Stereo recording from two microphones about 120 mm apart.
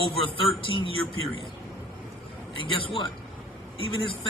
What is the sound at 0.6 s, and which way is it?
Speech, 45° left (ahead or behind).